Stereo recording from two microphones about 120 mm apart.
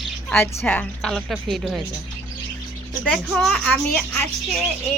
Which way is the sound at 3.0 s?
5° left (ahead or behind).